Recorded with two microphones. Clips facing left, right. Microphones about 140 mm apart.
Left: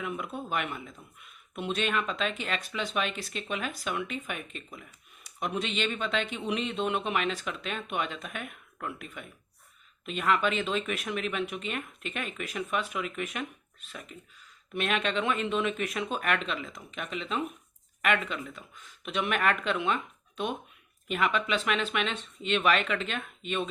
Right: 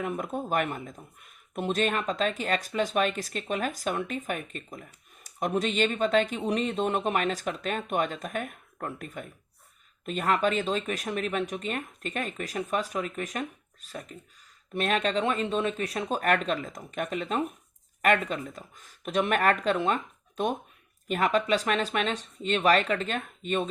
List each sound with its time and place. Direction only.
0.0 s speech: 45° right (ahead or behind)